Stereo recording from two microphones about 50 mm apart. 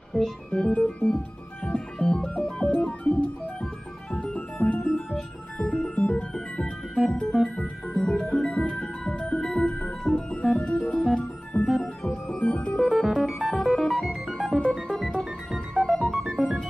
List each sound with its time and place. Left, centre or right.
0.1 s music: centre
0.8 s organ: left
1.1 s music: centre
2.6 s organ: left
4.1 s music: centre
4.8 s organ: centre
7.4 s music: centre
8.5 s music: centre
10.9 s organ: centre
11.6 s music: centre
12.3 s music: left
12.8 s music: centre